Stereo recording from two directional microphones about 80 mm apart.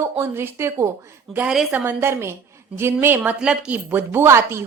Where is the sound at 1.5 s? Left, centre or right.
Centre.